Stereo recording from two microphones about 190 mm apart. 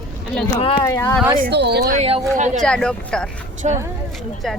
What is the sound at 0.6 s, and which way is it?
Speech, 30° left (ahead or behind).